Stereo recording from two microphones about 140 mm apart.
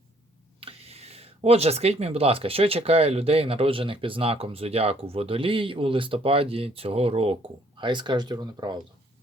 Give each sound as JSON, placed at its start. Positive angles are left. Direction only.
{"t": 0.6, "sound": "speech", "side_deg": -45}
{"t": 7.8, "sound": "speech", "side_deg": -35}